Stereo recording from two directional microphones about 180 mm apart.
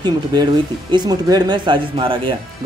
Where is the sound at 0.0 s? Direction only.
20° right (ahead or behind).